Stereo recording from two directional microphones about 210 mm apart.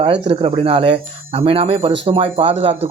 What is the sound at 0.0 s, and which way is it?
Speech, 25° right (ahead or behind).